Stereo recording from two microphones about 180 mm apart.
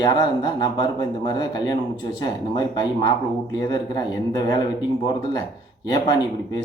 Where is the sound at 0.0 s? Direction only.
25° left (ahead or behind).